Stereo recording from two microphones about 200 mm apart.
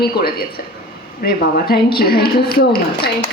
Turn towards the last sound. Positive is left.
turn(degrees=50)  # may be behind; listen again after turning